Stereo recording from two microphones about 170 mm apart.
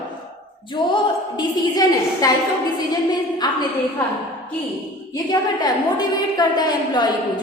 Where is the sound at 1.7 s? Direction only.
20° left (ahead or behind).